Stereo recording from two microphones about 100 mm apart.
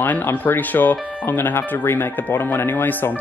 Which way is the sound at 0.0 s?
20° left (ahead or behind).